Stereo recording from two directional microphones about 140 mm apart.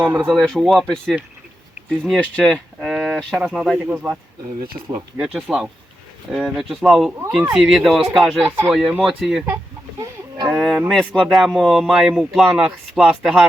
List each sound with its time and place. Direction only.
0.3 s speech: centre (ahead or behind)
2.8 s a sound: 5° right (ahead or behind)
3.2 s speech: 5° left (ahead or behind)
3.4 s speech: 5° right (ahead or behind)
5.1 s speech: 5° right (ahead or behind)
8.4 s speech: 10° right (ahead or behind)
10.0 s livestock: 30° right (ahead or behind)
10.5 s speech: 5° right (ahead or behind)